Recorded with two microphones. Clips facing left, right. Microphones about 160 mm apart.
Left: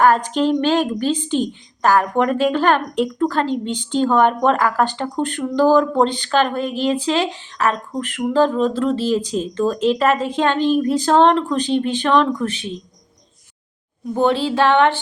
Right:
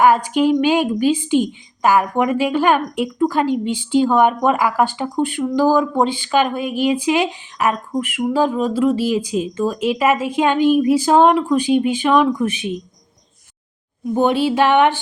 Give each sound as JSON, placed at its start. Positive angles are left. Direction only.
{"t": 0.0, "sound": "a woman's voice", "side_deg": -10}
{"t": 14.1, "sound": "a woman's voice", "side_deg": -15}